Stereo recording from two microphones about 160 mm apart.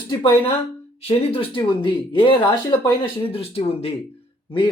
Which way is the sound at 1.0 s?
35° left (ahead or behind).